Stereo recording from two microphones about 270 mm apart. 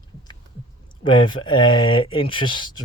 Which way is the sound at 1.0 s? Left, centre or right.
Centre.